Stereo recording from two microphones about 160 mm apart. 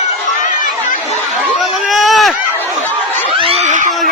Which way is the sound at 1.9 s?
Centre (ahead or behind).